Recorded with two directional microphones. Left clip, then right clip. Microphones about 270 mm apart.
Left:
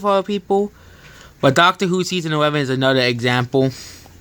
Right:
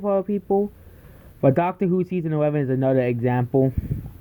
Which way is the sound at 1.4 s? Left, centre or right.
Centre.